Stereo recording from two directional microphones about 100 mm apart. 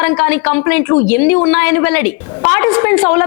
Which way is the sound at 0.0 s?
20° left (ahead or behind).